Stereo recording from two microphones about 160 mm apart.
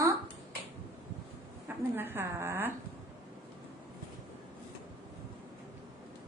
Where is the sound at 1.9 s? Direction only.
15° right (ahead or behind).